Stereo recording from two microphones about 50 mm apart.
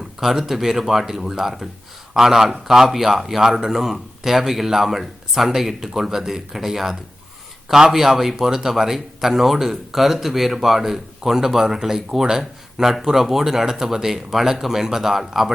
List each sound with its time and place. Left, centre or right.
0.2 s speech: centre